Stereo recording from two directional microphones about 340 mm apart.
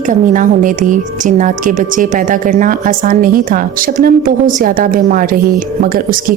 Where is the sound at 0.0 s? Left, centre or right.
Right.